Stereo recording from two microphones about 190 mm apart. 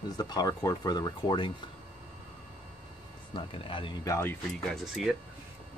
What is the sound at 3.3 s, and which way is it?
Speech, 25° left (ahead or behind).